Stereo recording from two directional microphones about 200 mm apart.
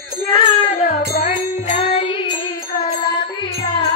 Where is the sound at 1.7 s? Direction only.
30° left (ahead or behind).